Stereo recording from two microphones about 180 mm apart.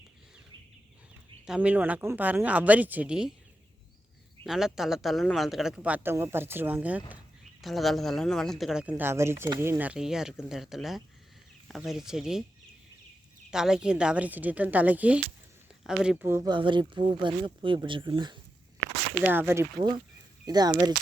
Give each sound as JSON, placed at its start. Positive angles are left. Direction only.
{"t": 1.5, "sound": "speech", "side_deg": -5}
{"t": 4.4, "sound": "speech", "side_deg": 0}
{"t": 13.5, "sound": "speech", "side_deg": -5}
{"t": 16.5, "sound": "speech", "side_deg": -25}
{"t": 19.2, "sound": "speech", "side_deg": -10}